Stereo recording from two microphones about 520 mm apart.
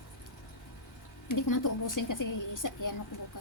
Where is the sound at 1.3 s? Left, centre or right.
Left.